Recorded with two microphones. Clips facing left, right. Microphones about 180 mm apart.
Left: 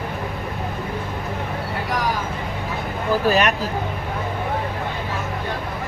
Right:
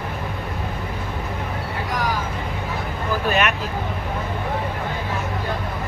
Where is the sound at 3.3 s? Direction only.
35° left (ahead or behind).